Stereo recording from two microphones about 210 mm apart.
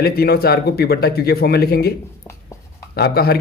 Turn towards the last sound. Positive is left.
turn(degrees=50)  # may be behind; listen again after turning